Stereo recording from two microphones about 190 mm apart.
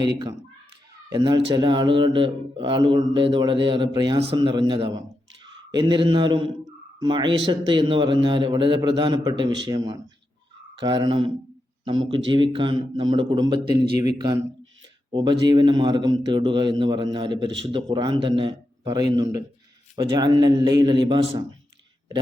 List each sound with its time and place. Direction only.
0.0 s speech: 20° right (ahead or behind)
15.1 s speech: 25° right (ahead or behind)